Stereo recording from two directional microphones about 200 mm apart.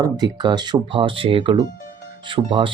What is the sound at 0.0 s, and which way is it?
Speech, 20° right (ahead or behind).